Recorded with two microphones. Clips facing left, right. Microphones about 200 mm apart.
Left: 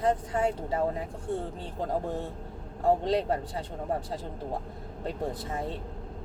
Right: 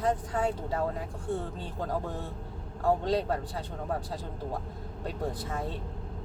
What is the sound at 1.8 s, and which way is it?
Speech, 25° left (ahead or behind).